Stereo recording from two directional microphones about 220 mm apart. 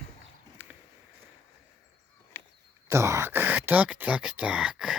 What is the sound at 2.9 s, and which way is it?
Speech, 10° right (ahead or behind).